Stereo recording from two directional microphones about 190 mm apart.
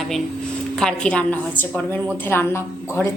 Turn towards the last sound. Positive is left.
turn(degrees=10)  # may be behind; listen again after turning